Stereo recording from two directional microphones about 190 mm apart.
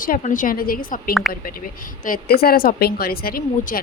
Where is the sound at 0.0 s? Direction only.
45° left (ahead or behind).